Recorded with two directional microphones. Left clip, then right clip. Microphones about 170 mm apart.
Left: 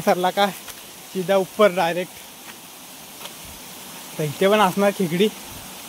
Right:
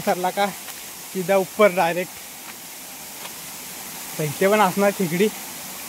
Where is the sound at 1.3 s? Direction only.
5° left (ahead or behind).